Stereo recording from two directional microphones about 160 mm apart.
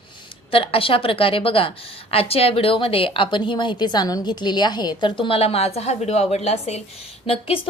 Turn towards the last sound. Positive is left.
turn(degrees=35)  # may be behind; listen again after turning